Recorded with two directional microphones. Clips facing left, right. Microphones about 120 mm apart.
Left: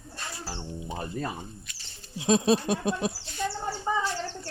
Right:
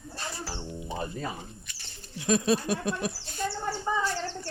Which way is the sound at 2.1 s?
20° left (ahead or behind).